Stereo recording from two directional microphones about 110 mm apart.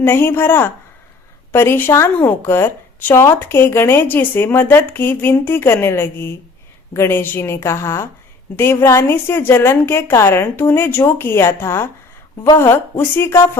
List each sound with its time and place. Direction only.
0.0 s a woman's voice: 20° left (ahead or behind)